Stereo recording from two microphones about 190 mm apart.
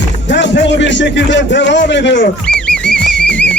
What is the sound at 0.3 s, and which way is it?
Speech, 70° left (ahead or behind).